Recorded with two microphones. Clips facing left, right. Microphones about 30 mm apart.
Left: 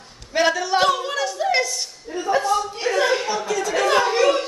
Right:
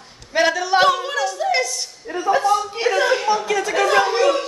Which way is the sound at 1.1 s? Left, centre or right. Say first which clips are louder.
Right 1 dB; centre.